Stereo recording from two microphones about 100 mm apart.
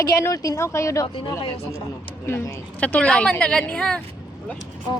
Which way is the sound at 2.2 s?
25° left (ahead or behind).